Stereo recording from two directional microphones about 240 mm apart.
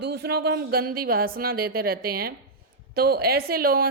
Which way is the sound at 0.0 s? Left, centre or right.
Right.